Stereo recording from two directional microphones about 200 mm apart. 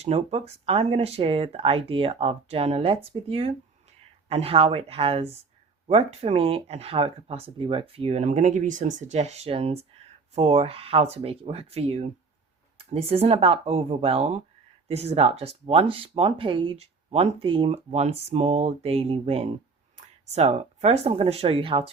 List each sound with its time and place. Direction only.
0.0 s speech: 30° right (ahead or behind)